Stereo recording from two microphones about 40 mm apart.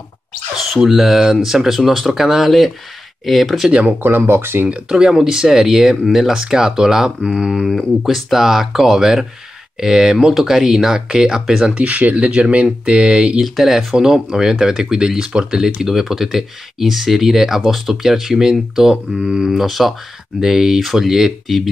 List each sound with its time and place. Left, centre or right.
0.6 s speech: centre
4.0 s speech: right
4.8 s speech: centre
11.7 s speech: right
12.6 s a sound: right
13.4 s speech: centre